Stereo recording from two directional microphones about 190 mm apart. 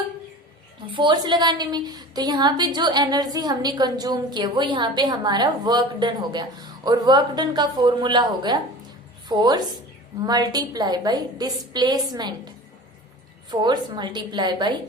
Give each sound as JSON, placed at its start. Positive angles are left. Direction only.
{"t": 0.9, "sound": "a woman's voice", "side_deg": -25}
{"t": 13.5, "sound": "a woman's voice", "side_deg": -20}